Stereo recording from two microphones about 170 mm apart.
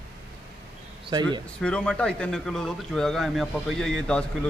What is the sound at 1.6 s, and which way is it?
A man's voice, 5° left (ahead or behind).